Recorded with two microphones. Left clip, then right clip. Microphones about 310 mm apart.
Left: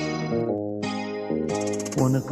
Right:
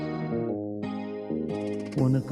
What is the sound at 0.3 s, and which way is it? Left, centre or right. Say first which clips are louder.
Music: left 5 dB; left.